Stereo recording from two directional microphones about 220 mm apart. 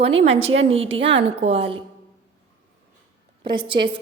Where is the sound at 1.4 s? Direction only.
25° right (ahead or behind).